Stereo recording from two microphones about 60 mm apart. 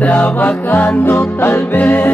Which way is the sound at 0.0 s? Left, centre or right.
Left.